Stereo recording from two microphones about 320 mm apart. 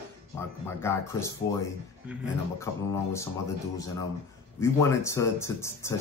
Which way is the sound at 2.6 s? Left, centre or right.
Centre.